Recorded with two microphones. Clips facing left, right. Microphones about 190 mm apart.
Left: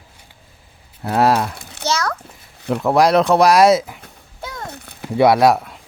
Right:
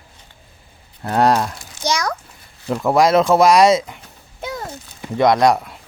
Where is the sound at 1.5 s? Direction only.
60° left (ahead or behind).